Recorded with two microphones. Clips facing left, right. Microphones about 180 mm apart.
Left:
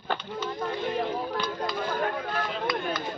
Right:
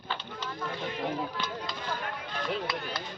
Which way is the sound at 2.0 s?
55° left (ahead or behind).